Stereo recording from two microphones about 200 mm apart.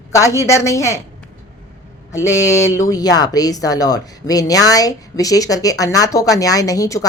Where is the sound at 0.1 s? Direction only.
15° left (ahead or behind).